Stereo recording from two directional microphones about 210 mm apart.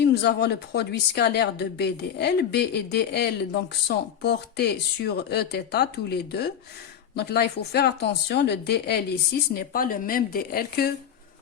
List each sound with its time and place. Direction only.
0.0 s a woman's voice: 50° left (ahead or behind)
9.6 s a woman's voice: 40° left (ahead or behind)